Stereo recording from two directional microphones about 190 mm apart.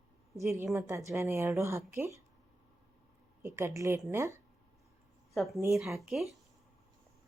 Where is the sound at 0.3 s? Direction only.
15° right (ahead or behind).